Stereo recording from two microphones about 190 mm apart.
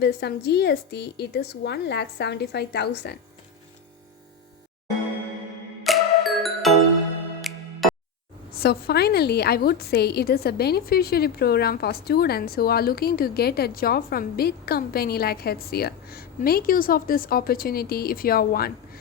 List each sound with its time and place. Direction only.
0.0 s a woman's voice: 60° left (ahead or behind)
5.8 s music: centre (ahead or behind)
8.5 s a woman's voice: 55° left (ahead or behind)